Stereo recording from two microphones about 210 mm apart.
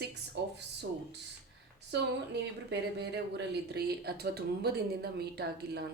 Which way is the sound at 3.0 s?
50° right (ahead or behind).